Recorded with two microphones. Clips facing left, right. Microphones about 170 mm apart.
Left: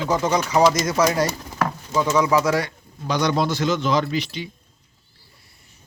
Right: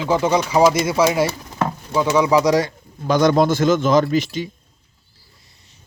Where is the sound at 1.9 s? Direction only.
15° right (ahead or behind).